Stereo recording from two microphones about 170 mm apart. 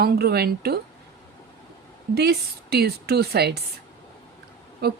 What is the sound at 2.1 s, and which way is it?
A woman's voice, 70° right (ahead or behind).